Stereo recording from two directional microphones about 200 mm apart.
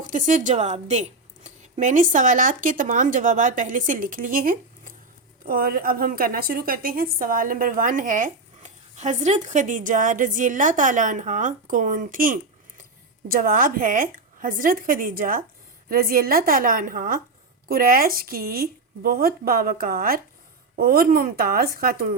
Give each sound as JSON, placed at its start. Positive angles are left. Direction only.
{"t": 0.0, "sound": "a woman's voice", "side_deg": -40}